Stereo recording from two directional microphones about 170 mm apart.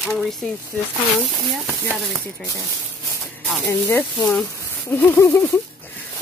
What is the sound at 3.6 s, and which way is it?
Speech, 15° left (ahead or behind).